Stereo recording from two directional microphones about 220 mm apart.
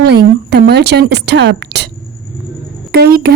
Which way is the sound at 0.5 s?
50° right (ahead or behind).